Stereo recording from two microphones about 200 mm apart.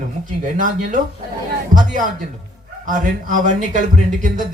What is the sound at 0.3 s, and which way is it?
Speech, 40° right (ahead or behind).